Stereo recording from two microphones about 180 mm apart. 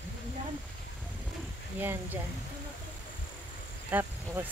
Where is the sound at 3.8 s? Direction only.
10° right (ahead or behind).